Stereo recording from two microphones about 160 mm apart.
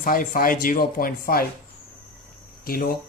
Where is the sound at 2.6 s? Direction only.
70° left (ahead or behind).